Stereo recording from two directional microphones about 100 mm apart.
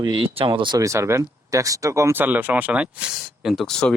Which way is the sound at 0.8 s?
30° right (ahead or behind).